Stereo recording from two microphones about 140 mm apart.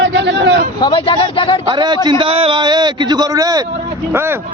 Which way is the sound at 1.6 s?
30° right (ahead or behind).